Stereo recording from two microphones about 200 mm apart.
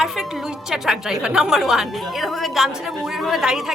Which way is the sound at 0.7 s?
5° right (ahead or behind).